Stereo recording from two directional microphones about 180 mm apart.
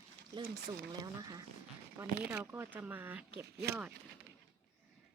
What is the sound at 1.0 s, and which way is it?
Speech, 20° right (ahead or behind).